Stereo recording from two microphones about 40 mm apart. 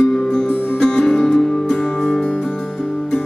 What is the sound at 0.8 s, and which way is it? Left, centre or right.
Music, centre.